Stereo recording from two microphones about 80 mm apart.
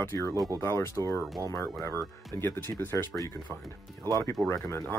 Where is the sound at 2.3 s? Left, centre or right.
Left.